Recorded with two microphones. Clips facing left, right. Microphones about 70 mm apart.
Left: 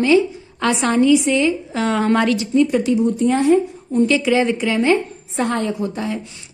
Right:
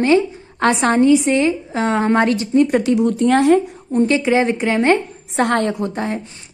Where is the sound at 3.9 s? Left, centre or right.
Right.